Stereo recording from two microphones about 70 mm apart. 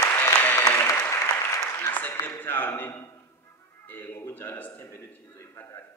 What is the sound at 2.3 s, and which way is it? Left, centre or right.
A man's voice, left.